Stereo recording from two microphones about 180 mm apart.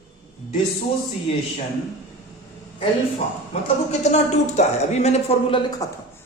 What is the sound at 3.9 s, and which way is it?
Speech, 40° left (ahead or behind).